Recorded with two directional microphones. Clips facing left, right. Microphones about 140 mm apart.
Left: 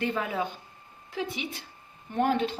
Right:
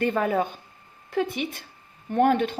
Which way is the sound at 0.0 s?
50° right (ahead or behind).